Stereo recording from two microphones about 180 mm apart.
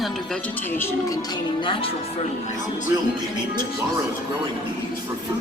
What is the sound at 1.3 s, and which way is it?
Music, 30° left (ahead or behind).